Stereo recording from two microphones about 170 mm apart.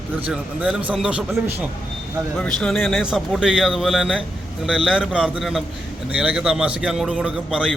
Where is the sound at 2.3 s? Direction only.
5° left (ahead or behind).